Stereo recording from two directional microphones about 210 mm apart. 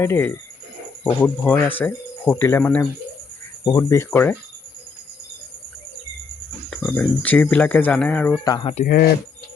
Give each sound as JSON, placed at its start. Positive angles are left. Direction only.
{"t": 0.0, "sound": "speech", "side_deg": 10}
{"t": 6.7, "sound": "speech", "side_deg": 5}
{"t": 8.4, "sound": "speech", "side_deg": 20}
{"t": 8.7, "sound": "speech", "side_deg": 40}